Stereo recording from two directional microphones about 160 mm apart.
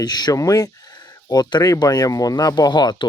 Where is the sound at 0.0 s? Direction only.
25° left (ahead or behind).